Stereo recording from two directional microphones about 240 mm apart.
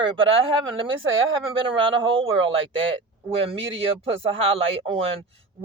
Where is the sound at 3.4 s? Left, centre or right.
Right.